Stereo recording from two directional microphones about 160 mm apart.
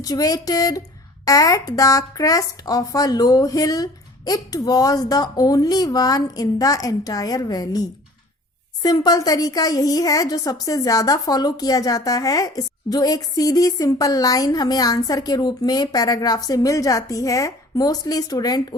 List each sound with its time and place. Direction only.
0.0 s a woman's voice: 25° left (ahead or behind)